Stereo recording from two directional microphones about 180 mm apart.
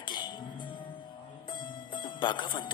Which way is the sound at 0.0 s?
25° left (ahead or behind).